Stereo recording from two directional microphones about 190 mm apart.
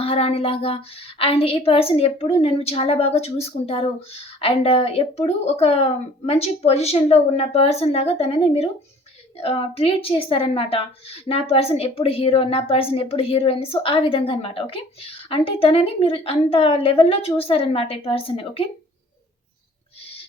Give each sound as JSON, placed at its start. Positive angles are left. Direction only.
{"t": 0.0, "sound": "a woman's voice", "side_deg": 30}